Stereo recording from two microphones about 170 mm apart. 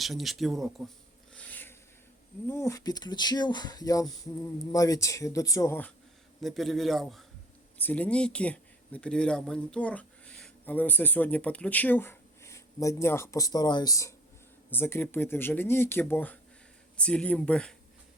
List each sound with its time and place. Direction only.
0.0 s a man's voice: centre (ahead or behind)
1.3 s rub: 10° left (ahead or behind)
2.5 s speech: 15° left (ahead or behind)
6.4 s a man's voice: centre (ahead or behind)